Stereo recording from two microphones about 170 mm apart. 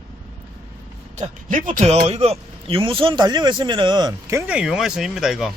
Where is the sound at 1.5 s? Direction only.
50° right (ahead or behind); by 4.4 s 25° right (ahead or behind).